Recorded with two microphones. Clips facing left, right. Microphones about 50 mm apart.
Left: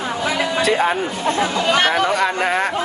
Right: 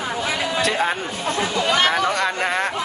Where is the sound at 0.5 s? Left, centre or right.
Centre.